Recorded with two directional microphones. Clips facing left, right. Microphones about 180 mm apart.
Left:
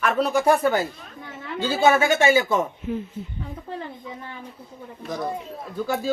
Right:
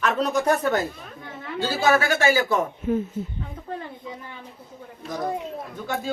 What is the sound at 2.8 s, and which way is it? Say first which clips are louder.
Speech: right 4 dB; 45° right (ahead or behind).